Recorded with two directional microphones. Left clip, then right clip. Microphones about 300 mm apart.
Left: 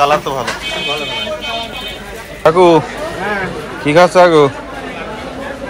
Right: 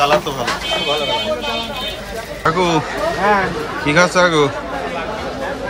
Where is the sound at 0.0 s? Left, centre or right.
Centre.